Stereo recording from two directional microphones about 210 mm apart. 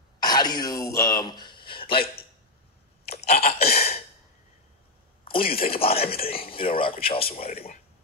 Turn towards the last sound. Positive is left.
turn(degrees=30)  # may be behind; listen again after turning